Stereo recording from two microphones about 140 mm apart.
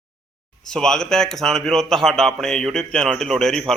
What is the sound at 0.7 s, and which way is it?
A man's voice, 5° left (ahead or behind).